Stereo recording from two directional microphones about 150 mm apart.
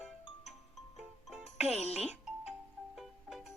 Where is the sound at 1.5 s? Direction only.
45° left (ahead or behind).